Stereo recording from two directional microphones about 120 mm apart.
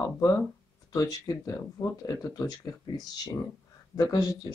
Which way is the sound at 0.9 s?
30° left (ahead or behind).